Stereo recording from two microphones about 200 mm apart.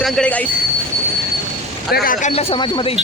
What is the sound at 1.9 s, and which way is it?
Speech, 45° left (ahead or behind).